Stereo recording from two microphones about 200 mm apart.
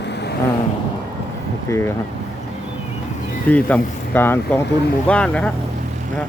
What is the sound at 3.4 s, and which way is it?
Speech, 10° left (ahead or behind).